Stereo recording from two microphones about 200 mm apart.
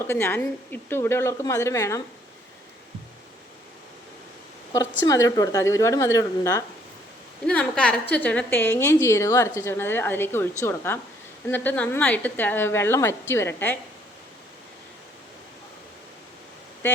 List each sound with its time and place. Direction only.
0.1 s a woman's voice: 10° left (ahead or behind)
5.0 s a woman's voice: 15° left (ahead or behind)
7.4 s a woman's voice: 5° left (ahead or behind)